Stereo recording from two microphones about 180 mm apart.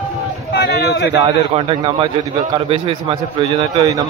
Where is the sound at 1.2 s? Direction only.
30° right (ahead or behind).